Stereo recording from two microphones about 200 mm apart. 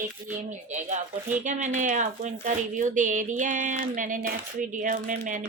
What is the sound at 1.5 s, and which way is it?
A woman's voice, 35° right (ahead or behind).